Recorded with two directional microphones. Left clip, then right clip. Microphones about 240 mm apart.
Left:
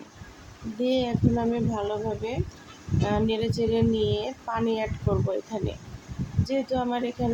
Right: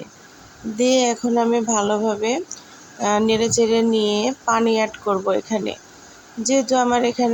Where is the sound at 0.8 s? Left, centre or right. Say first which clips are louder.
Right 8 dB; right.